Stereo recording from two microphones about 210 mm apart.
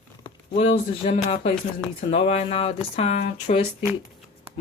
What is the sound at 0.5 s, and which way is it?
Speech, 30° left (ahead or behind).